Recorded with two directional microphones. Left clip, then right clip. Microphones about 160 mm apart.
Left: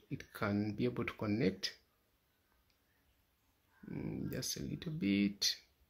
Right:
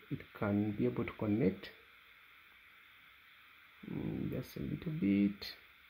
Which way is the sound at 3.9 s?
10° left (ahead or behind).